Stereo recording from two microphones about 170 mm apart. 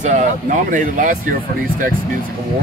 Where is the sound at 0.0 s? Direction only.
45° right (ahead or behind).